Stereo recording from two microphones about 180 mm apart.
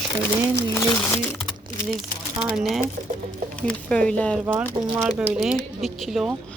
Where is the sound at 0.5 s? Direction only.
15° left (ahead or behind).